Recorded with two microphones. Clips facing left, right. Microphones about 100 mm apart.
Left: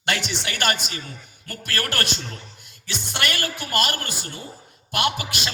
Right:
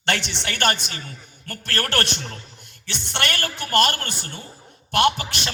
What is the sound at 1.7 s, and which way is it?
Speech, 60° right (ahead or behind).